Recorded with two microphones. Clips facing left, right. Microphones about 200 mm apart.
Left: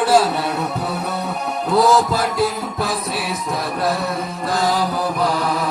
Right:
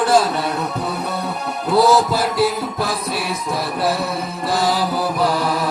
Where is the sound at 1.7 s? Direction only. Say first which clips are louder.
Right 1 dB; 5° right (ahead or behind).